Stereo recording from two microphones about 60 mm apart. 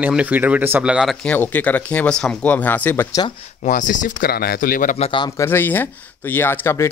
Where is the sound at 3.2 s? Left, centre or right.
Left.